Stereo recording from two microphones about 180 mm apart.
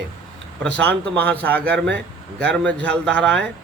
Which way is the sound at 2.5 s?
5° left (ahead or behind).